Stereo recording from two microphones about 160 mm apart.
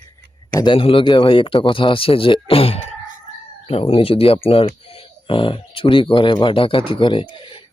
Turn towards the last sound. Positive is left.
turn(degrees=30)  # may be behind; listen again after turning